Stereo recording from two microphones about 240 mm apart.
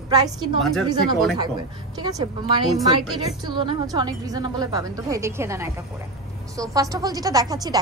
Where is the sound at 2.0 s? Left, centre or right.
Centre.